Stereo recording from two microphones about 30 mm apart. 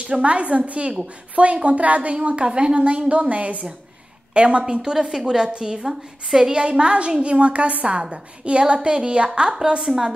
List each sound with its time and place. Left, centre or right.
0.0 s a woman's voice: right
2.2 s a woman's voice: right
4.3 s a woman's voice: right
4.9 s a woman's voice: centre
6.5 s a woman's voice: right